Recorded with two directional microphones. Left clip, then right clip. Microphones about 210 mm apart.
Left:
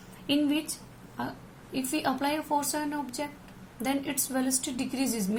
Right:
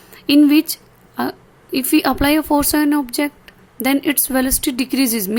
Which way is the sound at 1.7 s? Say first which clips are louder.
Right 13 dB; 50° right (ahead or behind).